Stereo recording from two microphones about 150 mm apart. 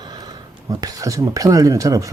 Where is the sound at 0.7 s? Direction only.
25° right (ahead or behind).